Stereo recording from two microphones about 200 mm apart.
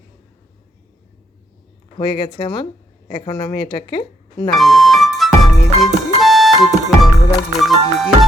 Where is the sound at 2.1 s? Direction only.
25° left (ahead or behind).